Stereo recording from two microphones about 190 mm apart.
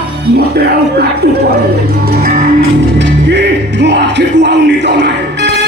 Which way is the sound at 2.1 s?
50° right (ahead or behind).